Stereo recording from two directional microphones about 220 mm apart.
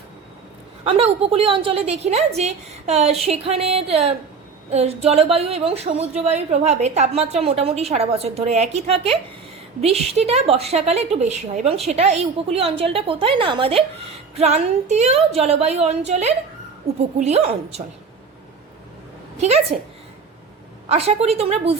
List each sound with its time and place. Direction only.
0.9 s a woman's voice: 25° right (ahead or behind)
19.4 s a woman's voice: 30° right (ahead or behind)
20.8 s a woman's voice: 25° right (ahead or behind)